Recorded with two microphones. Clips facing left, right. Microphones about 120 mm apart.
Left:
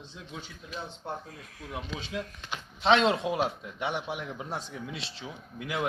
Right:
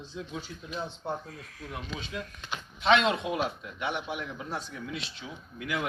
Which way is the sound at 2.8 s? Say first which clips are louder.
Left 1 dB; 30° left (ahead or behind).